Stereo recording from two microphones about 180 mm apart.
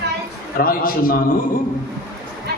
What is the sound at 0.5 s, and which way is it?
Speech, 55° left (ahead or behind).